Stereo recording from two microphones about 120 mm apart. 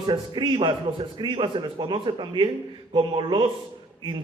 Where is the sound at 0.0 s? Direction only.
40° right (ahead or behind).